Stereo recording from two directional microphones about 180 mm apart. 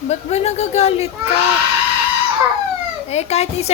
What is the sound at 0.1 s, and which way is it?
A woman's voice, 35° left (ahead or behind).